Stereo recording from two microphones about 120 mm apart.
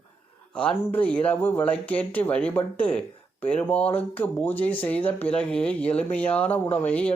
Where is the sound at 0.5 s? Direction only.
10° left (ahead or behind).